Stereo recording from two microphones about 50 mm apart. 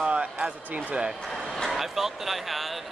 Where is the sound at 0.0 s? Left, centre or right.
Right.